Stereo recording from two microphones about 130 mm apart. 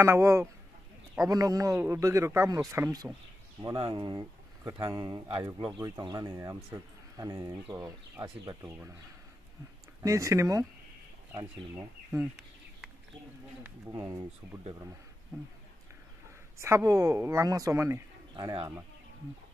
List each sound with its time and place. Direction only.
0.0 s speech: 20° right (ahead or behind)
3.7 s speech: 40° right (ahead or behind); by 7.5 s 25° right (ahead or behind)
10.0 s speech: 25° right (ahead or behind)
13.7 s speech: 15° right (ahead or behind)
16.5 s speech: 20° right (ahead or behind)
18.3 s speech: 35° right (ahead or behind)